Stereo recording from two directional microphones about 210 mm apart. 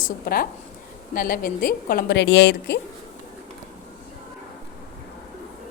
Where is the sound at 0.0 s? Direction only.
45° left (ahead or behind).